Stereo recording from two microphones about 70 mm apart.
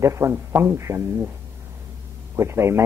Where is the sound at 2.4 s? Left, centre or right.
Right.